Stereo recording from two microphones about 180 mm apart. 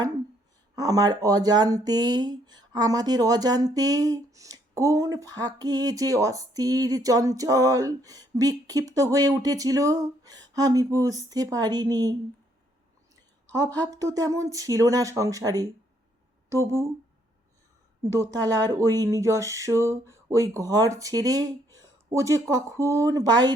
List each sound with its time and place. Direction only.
0.8 s speech: 20° right (ahead or behind)
13.7 s speech: 20° right (ahead or behind)
18.0 s speech: 20° right (ahead or behind)